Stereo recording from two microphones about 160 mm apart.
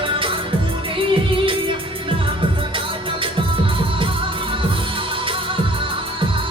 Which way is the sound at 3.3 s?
30° right (ahead or behind).